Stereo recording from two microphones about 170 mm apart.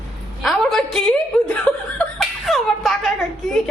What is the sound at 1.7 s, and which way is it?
Chuckle, 5° left (ahead or behind).